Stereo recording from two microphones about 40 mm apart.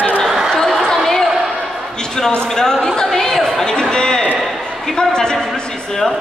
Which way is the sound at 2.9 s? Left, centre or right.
Centre.